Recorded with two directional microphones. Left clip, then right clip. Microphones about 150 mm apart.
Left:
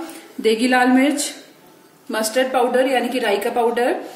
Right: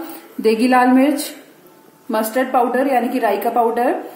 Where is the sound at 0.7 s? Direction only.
Centre (ahead or behind).